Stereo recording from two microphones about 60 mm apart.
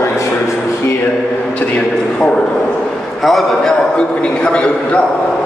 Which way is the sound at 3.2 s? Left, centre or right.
Centre.